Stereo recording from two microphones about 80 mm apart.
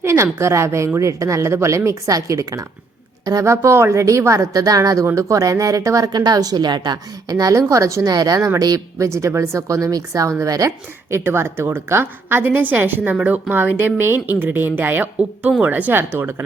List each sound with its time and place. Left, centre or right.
0.0 s a woman's voice: right
6.1 s a woman's voice: right
8.0 s a woman's voice: right
11.1 s speech: right